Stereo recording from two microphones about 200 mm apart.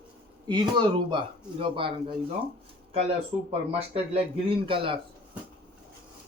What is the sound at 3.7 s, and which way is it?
Speech, 30° right (ahead or behind).